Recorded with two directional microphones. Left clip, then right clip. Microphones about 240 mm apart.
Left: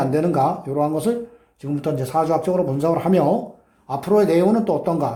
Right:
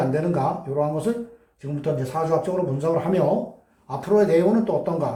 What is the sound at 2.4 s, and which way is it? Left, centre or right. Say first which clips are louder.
Speech: left 4 dB; left.